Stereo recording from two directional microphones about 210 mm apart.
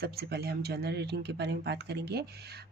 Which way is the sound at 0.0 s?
50° right (ahead or behind).